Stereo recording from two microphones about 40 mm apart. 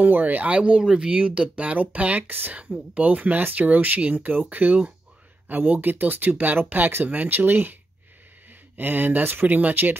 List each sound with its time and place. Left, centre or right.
0.0 s speech: right
2.2 s speech: right
2.9 s speech: right
8.7 s speech: right